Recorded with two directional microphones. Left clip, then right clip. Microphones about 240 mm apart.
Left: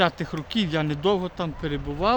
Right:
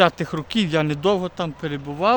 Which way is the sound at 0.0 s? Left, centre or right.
Right.